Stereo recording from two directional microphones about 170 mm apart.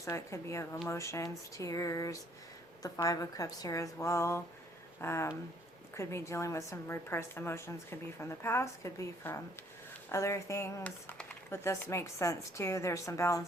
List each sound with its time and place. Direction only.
0.0 s a woman's voice: 15° left (ahead or behind)